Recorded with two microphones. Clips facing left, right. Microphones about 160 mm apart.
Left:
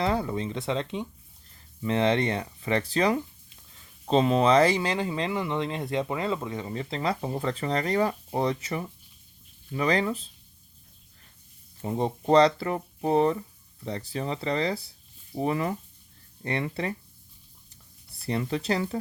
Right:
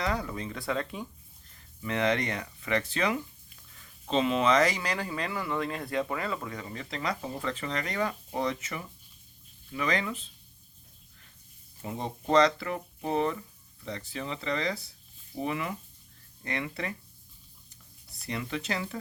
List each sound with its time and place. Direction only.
0.0 s speech: 30° left (ahead or behind)
11.8 s speech: 35° left (ahead or behind)
18.3 s speech: 35° left (ahead or behind)